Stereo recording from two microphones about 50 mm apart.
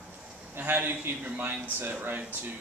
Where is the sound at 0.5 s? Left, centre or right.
Right.